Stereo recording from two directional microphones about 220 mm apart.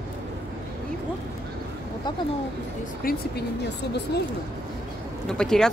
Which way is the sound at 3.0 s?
40° left (ahead or behind).